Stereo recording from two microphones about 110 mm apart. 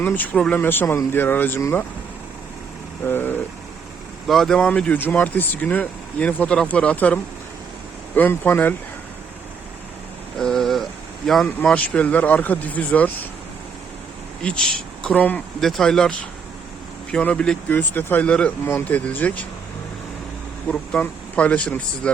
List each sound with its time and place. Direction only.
0.0 s speech: 15° left (ahead or behind)
3.0 s speech: 20° left (ahead or behind)
4.3 s speech: 5° left (ahead or behind)
10.3 s a sound: 5° left (ahead or behind)
11.4 s speech: 15° left (ahead or behind)
14.4 s speech: 10° left (ahead or behind)
20.7 s speech: 10° left (ahead or behind)